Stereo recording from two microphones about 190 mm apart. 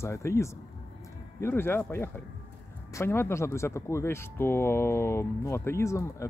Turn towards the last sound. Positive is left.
turn(degrees=15)  # may be behind; listen again after turning